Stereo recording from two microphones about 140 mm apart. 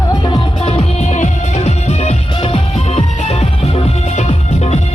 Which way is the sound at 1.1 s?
55° left (ahead or behind).